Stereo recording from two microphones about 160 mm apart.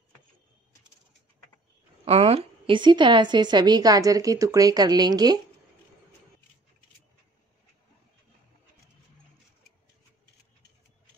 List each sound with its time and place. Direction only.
2.0 s a woman's voice: 40° right (ahead or behind)